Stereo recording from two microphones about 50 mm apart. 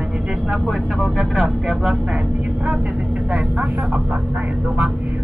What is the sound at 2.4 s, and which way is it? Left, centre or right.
Speech, right.